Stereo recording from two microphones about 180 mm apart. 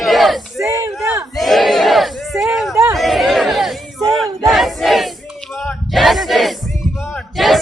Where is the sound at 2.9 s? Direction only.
Centre (ahead or behind).